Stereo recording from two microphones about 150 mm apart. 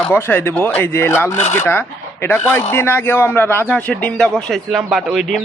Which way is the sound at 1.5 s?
15° left (ahead or behind).